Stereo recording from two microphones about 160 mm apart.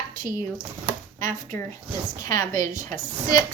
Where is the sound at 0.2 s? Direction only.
55° right (ahead or behind).